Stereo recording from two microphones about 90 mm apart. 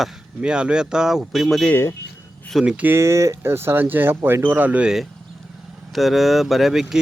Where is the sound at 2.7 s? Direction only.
25° right (ahead or behind).